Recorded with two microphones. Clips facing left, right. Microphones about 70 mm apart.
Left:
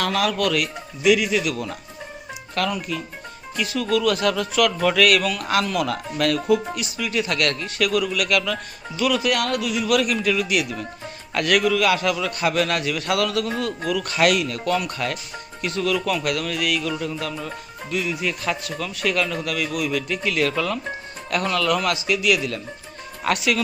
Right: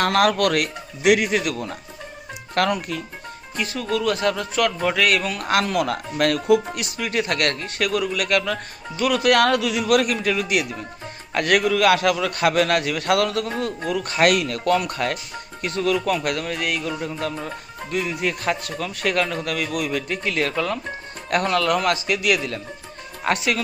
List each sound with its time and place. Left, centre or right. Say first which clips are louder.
0.0 s a man's voice: right 4 dB; right
2.6 s speech: right 4 dB; right
3.5 s a man's voice: left 2 dB; right
9.2 s speech: right 5 dB; right
9.8 s a man's voice: left 1 dB; right